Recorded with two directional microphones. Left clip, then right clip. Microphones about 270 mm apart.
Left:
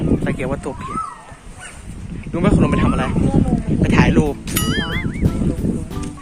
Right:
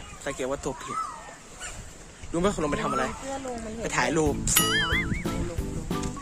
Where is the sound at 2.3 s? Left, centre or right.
Centre.